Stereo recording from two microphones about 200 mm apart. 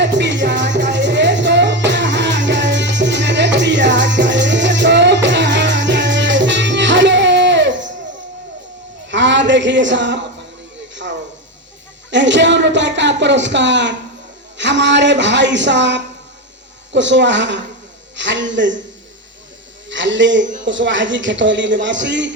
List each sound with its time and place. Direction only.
0.0 s music: 60° right (ahead or behind)
9.0 s a sound: 65° right (ahead or behind)
12.1 s a man's voice: 65° right (ahead or behind)
19.9 s a man's voice: 65° right (ahead or behind)